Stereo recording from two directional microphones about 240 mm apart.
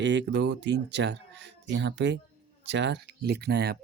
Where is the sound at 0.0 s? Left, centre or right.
Right.